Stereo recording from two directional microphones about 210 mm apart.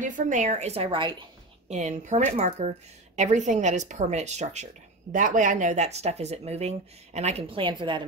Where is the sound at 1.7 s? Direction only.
35° right (ahead or behind).